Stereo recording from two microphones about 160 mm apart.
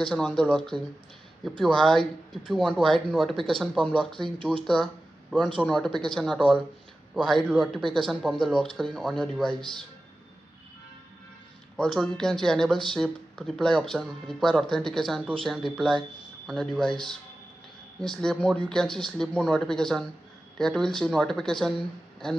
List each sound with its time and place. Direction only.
0.0 s speech: 5° left (ahead or behind)
4.4 s speech: 30° right (ahead or behind)
5.6 s speech: 5° left (ahead or behind)
11.7 s speech: centre (ahead or behind)